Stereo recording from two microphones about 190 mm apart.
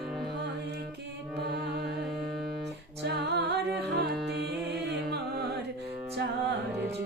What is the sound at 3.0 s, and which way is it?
A capella, 60° right (ahead or behind).